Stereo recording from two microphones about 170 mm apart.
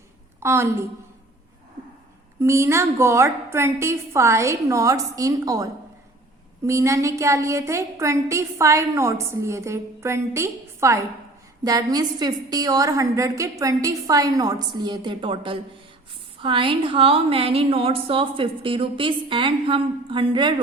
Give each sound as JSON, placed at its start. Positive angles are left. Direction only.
{"t": 0.3, "sound": "a woman's voice", "side_deg": -15}
{"t": 2.4, "sound": "a woman's voice", "side_deg": -15}
{"t": 6.7, "sound": "a woman's voice", "side_deg": -15}